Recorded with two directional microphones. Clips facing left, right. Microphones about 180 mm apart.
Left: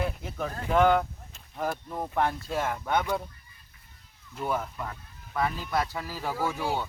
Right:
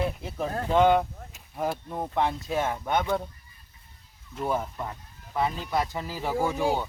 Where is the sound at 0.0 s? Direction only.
30° right (ahead or behind).